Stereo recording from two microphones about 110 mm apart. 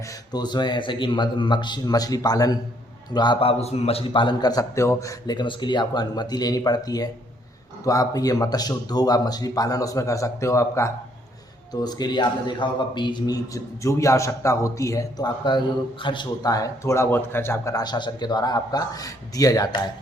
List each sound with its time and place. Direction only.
0.3 s a man's voice: 40° left (ahead or behind)
3.4 s a man's voice: 75° left (ahead or behind); by 10.9 s 25° left (ahead or behind)
11.7 s a man's voice: 40° left (ahead or behind)
16.0 s a man's voice: 40° left (ahead or behind); by 17.7 s 20° left (ahead or behind)
17.7 s a man's voice: 40° left (ahead or behind)